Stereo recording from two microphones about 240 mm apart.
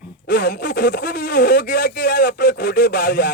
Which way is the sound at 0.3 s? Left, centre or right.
Left.